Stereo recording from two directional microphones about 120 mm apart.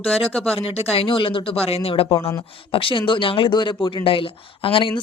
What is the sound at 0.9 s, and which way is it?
Speech, 45° left (ahead or behind).